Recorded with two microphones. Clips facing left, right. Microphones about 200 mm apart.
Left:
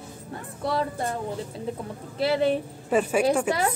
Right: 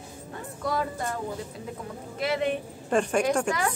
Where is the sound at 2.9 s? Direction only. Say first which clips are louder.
Left 2 dB; 5° left (ahead or behind).